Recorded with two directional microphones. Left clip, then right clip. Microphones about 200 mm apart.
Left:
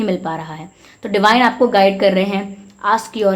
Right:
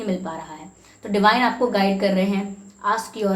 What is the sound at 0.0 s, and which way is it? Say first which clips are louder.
A woman's voice: left 7 dB; 50° left (ahead or behind).